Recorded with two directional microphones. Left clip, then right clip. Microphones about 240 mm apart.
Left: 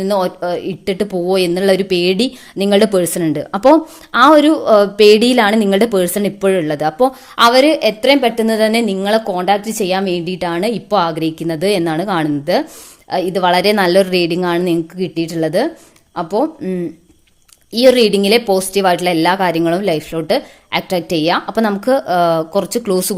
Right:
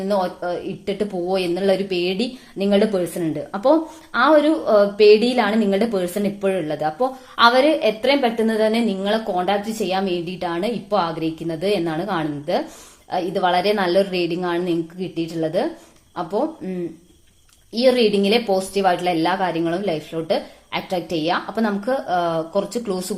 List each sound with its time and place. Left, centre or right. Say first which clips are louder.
0.0 s a woman's voice: left 5 dB; left